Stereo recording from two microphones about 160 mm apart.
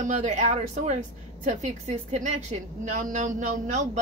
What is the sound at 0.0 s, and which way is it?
A woman's voice, 50° right (ahead or behind).